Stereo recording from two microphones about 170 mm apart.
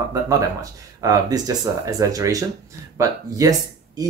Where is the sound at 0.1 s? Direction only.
20° right (ahead or behind).